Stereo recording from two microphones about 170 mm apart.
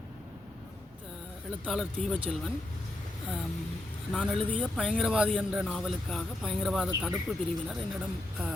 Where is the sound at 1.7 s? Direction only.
5° left (ahead or behind).